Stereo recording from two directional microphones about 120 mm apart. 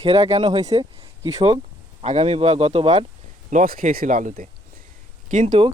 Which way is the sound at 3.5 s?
90° right.